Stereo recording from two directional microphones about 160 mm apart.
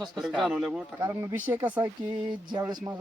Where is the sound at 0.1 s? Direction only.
Centre (ahead or behind).